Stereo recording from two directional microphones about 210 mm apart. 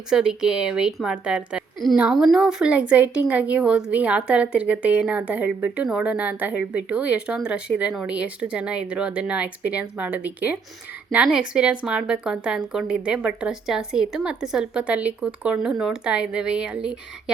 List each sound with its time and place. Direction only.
0.1 s a woman's voice: centre (ahead or behind)